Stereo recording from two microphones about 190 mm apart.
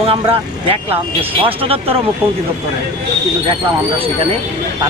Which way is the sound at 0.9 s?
30° right (ahead or behind).